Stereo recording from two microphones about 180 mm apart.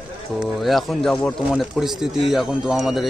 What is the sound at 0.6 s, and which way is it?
Speech, centre (ahead or behind).